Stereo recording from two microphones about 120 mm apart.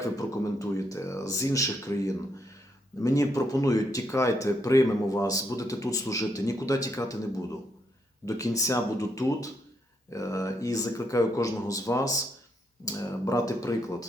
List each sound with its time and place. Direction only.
0.0 s speech: 30° left (ahead or behind)
8.2 s speech: 30° left (ahead or behind)